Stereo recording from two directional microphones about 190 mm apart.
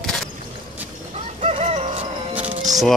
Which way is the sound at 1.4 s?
35° right (ahead or behind).